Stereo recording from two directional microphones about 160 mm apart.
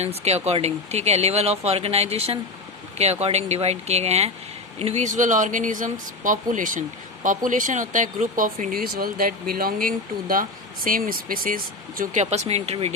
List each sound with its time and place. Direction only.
0.0 s speech: 40° right (ahead or behind); by 12.2 s 60° right (ahead or behind)
12.2 s speech: 45° right (ahead or behind)